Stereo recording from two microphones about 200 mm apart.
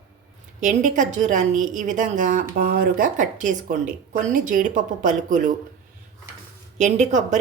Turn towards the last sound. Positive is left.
turn(degrees=-35)  # may be behind; listen again after turning